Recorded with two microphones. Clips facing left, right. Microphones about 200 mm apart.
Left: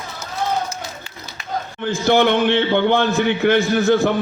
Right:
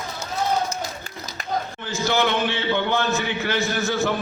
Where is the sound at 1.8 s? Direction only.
55° left (ahead or behind).